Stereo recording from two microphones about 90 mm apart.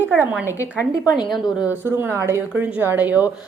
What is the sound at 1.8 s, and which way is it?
A woman's voice, 25° right (ahead or behind).